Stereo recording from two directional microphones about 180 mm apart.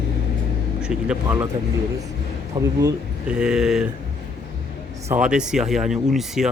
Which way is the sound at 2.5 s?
20° right (ahead or behind).